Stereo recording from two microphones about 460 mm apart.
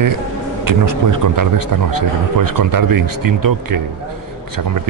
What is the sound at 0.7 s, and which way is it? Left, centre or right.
A man's voice, right.